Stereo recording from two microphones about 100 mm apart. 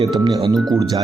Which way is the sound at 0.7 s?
40° right (ahead or behind).